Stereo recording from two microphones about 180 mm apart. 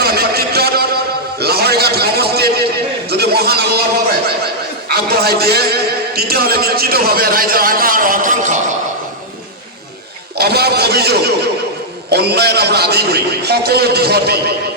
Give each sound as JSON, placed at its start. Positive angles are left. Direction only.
{"t": 0.0, "sound": "a sound", "side_deg": -60}
{"t": 4.9, "sound": "a man's voice", "side_deg": -60}
{"t": 10.3, "sound": "a man's voice", "side_deg": -60}